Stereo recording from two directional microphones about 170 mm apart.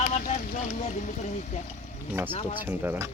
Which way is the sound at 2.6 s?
10° right (ahead or behind).